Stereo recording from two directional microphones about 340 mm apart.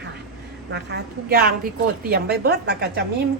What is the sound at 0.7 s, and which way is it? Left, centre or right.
A woman's voice, right.